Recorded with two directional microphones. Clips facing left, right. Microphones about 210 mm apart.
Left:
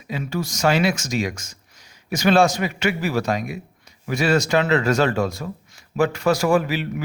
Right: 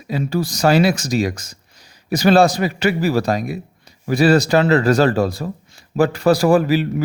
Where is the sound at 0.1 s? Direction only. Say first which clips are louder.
Right 5 dB; 35° right (ahead or behind).